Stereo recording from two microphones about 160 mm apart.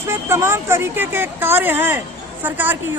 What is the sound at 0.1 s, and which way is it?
Speech, 15° right (ahead or behind).